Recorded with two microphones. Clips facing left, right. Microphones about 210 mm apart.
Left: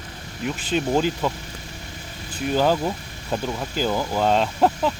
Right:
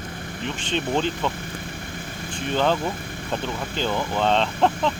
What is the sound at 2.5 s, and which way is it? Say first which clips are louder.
Speech: left 2 dB; 5° left (ahead or behind).